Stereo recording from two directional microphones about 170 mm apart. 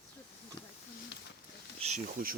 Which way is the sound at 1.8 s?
40° right (ahead or behind).